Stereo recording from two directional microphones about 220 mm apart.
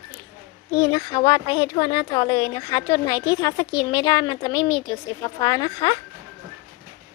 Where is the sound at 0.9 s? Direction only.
20° left (ahead or behind).